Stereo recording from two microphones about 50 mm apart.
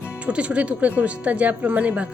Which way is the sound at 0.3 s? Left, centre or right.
Right.